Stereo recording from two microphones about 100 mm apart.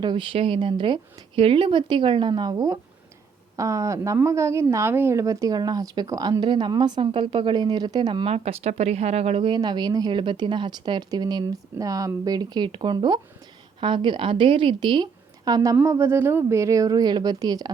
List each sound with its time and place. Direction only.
0.0 s a woman's voice: 50° right (ahead or behind)
7.1 s a woman's voice: 60° right (ahead or behind)
8.3 s speech: 90° right
9.5 s a woman's voice: 45° right (ahead or behind)